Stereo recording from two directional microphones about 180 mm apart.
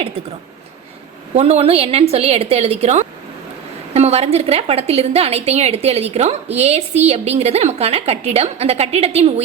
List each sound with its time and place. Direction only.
1.3 s a woman's voice: 35° right (ahead or behind)